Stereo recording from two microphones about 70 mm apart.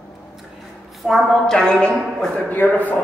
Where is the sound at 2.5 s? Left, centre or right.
Left.